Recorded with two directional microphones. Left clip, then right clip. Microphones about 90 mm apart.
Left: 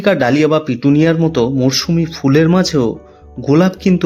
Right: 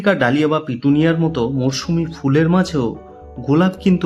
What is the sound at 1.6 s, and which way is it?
Speech, 25° left (ahead or behind).